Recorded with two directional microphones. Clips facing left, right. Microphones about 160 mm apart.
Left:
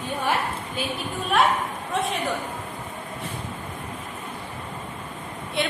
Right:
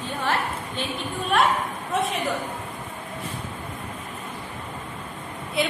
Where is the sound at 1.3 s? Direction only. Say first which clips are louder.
Left 1 dB; centre (ahead or behind).